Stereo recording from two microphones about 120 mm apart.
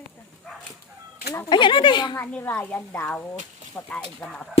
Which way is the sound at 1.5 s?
40° left (ahead or behind).